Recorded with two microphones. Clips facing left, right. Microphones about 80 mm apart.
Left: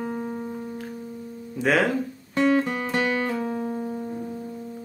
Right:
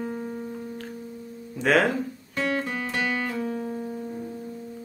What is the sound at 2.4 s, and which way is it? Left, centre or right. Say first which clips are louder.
Music: left 6 dB; left.